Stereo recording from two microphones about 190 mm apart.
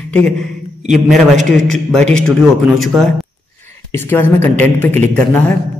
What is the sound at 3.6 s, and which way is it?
Speech, 10° left (ahead or behind).